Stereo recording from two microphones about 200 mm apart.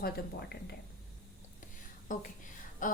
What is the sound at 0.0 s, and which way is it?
Speech, 50° left (ahead or behind).